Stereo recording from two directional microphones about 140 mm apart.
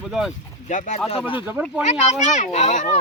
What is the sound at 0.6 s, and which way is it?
Speech, 60° left (ahead or behind).